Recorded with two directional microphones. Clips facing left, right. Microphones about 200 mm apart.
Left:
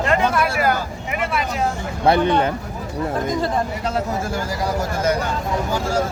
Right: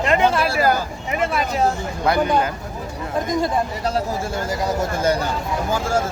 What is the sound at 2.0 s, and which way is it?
Speech, 30° left (ahead or behind).